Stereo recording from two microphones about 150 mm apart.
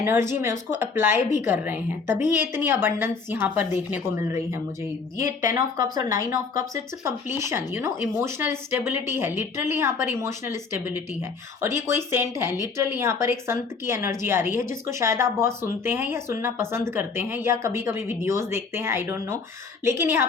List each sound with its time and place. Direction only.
0.0 s a woman's voice: 15° right (ahead or behind)